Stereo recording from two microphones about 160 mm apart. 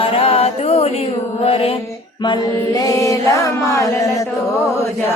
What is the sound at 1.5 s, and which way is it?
Mantra, 35° left (ahead or behind).